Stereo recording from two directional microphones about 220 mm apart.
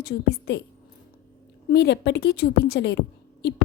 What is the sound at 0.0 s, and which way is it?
Speech, 45° left (ahead or behind).